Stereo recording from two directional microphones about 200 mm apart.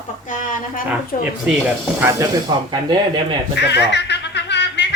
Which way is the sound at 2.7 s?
20° right (ahead or behind).